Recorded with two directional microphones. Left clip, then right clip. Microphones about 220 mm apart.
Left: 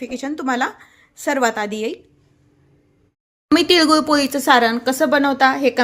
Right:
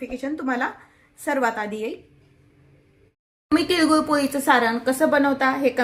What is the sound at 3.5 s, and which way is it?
Speech, 45° left (ahead or behind).